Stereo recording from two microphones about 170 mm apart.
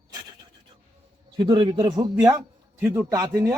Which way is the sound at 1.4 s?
25° right (ahead or behind).